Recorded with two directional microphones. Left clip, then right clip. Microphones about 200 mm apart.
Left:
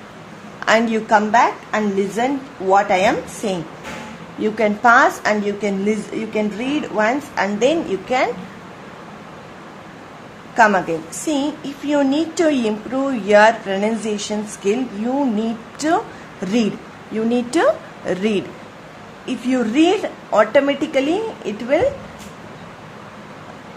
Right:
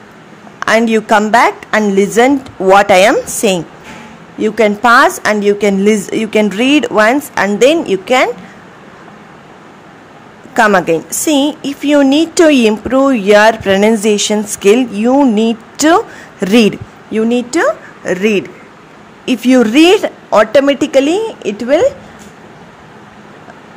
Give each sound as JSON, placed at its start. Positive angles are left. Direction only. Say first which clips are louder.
{"t": 0.6, "sound": "a woman's voice", "louder": "right 6 dB", "side_deg": -35}
{"t": 4.4, "sound": "a woman's voice", "louder": "right 7 dB", "side_deg": -35}
{"t": 10.5, "sound": "a woman's voice", "louder": "right 5 dB", "side_deg": -40}
{"t": 17.1, "sound": "speech", "louder": "right 6 dB", "side_deg": -25}
{"t": 19.2, "sound": "a woman's voice", "louder": "right 11 dB", "side_deg": -40}